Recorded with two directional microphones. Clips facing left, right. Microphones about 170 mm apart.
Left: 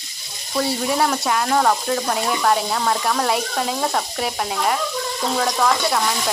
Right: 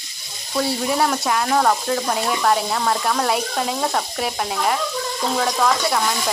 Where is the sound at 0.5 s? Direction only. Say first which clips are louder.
Even; centre (ahead or behind).